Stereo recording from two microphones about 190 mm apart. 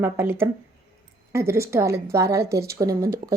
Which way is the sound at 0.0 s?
10° right (ahead or behind).